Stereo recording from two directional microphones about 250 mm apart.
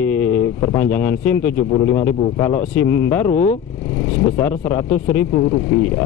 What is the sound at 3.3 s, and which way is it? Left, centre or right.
Speech, left.